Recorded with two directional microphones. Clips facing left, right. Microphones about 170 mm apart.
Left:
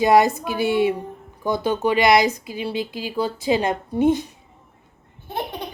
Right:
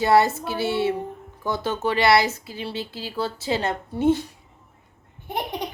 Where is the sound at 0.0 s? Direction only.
15° left (ahead or behind).